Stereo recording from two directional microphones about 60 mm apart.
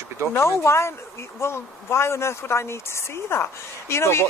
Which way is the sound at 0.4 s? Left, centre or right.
Left.